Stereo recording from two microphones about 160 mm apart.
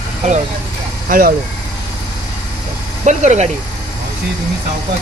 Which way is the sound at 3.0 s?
45° right (ahead or behind).